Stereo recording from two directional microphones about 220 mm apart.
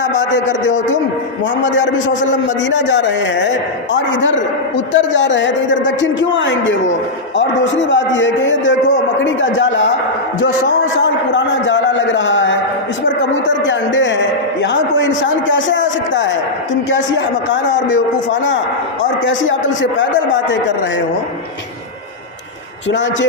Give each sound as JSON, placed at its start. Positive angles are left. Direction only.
{"t": 1.6, "sound": "a man's voice", "side_deg": 55}
{"t": 13.7, "sound": "a man's voice", "side_deg": 55}